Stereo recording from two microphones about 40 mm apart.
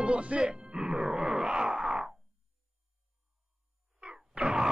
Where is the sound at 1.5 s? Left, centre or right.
Right.